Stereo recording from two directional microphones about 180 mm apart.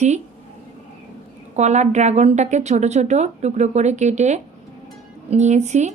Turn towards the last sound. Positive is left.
turn(degrees=-40)  # may be behind; listen again after turning